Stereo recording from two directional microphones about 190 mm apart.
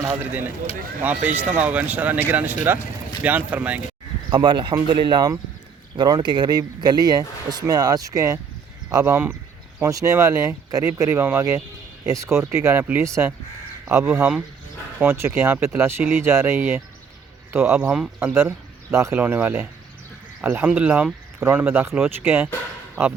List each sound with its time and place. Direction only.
0.0 s speech: 10° right (ahead or behind)
4.3 s speech: 25° right (ahead or behind)